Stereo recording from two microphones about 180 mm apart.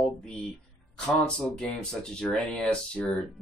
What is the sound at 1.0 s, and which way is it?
Speech, 5° left (ahead or behind).